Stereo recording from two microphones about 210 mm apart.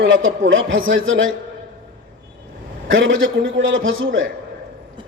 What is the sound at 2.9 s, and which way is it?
A man's voice, 65° right (ahead or behind).